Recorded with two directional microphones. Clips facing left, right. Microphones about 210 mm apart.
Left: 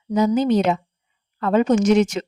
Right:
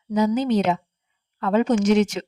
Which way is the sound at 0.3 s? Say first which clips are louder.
Left 3 dB; 45° left (ahead or behind).